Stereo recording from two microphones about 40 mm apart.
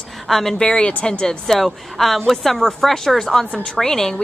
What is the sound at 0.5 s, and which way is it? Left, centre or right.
Speech, left.